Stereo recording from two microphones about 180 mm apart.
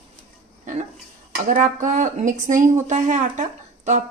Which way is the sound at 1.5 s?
45° right (ahead or behind).